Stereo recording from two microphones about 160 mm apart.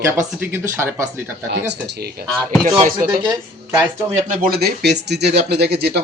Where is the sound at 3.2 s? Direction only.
25° right (ahead or behind).